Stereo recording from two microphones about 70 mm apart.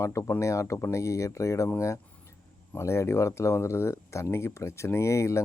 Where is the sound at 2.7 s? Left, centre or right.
Left.